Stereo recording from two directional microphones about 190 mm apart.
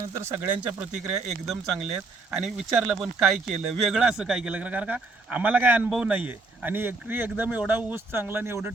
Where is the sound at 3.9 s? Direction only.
Centre (ahead or behind).